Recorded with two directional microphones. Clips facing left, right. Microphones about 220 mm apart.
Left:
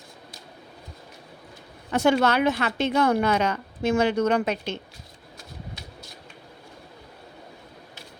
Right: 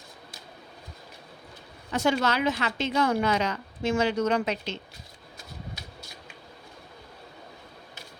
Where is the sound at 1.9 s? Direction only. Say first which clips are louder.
Left 5 dB; 60° left (ahead or behind).